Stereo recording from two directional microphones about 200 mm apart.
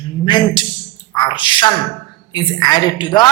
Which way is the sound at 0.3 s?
25° left (ahead or behind).